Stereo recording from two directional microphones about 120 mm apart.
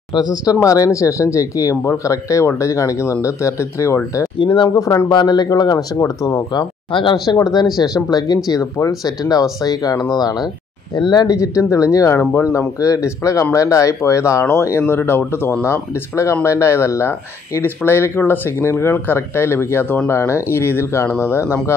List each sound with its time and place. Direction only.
0.1 s speech: 35° left (ahead or behind)
4.4 s speech: 40° left (ahead or behind)
4.6 s speech: 25° left (ahead or behind)
6.9 s speech: 40° left (ahead or behind); by 21.5 s 20° left (ahead or behind)